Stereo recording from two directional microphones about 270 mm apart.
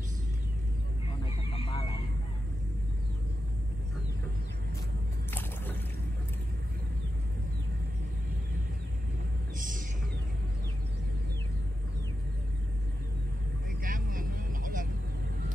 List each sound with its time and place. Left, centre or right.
1.2 s goose: centre
9.6 s a sound: right
13.8 s vehicle: right